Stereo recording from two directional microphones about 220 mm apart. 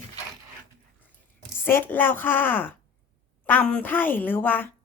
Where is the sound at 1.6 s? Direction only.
10° left (ahead or behind).